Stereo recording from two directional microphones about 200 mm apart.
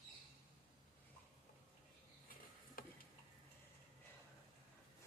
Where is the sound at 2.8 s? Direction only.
45° left (ahead or behind).